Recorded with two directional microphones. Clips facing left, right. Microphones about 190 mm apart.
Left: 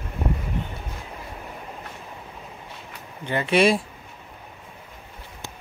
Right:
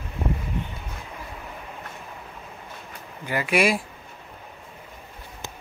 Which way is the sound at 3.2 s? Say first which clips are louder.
Left 3 dB; 25° left (ahead or behind).